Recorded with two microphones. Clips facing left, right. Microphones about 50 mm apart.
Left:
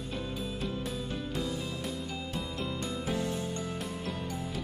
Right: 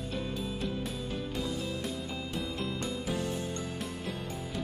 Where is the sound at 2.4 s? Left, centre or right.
Centre.